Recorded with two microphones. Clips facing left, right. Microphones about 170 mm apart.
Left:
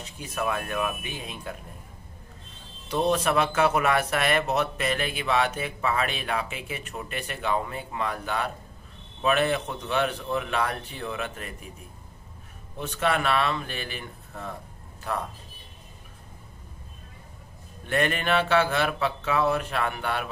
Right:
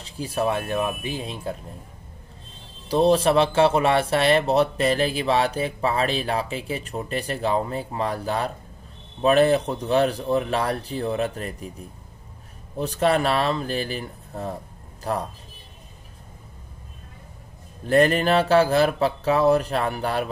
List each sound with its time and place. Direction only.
0.0 s speech: 30° right (ahead or behind)
2.9 s speech: 30° right (ahead or behind)
12.7 s speech: 35° right (ahead or behind)
17.8 s speech: 35° right (ahead or behind)